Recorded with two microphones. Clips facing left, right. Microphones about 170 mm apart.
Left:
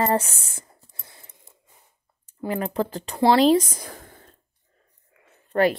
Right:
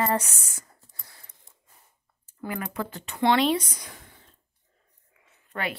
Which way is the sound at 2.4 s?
30° left (ahead or behind).